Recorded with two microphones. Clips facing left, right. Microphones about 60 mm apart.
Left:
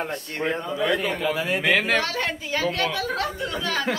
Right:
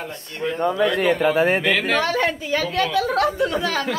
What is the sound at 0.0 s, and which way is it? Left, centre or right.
Speech, left.